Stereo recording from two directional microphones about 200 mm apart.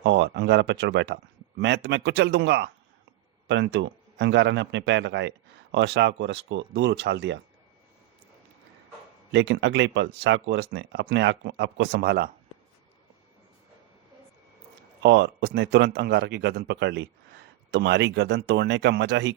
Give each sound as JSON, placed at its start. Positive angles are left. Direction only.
{"t": 0.0, "sound": "speech", "side_deg": -60}
{"t": 9.3, "sound": "speech", "side_deg": -60}
{"t": 15.0, "sound": "speech", "side_deg": -60}